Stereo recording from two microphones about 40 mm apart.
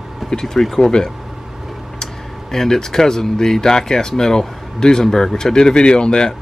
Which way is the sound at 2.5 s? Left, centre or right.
Centre.